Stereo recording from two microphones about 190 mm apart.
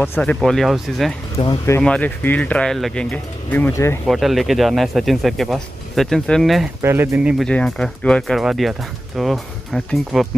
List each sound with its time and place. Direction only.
0.0 s speech: 10° left (ahead or behind)
1.3 s speech: 20° left (ahead or behind)
1.8 s speech: 5° left (ahead or behind)
4.1 s speech: centre (ahead or behind)
6.8 s speech: 15° right (ahead or behind)